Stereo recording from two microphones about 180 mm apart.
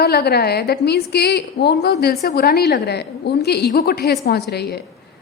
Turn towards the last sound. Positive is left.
turn(degrees=65)  # may be behind; listen again after turning